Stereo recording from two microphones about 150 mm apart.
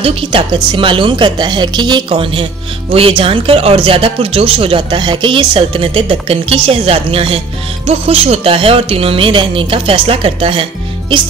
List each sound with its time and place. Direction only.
0.0 s speech: 35° right (ahead or behind)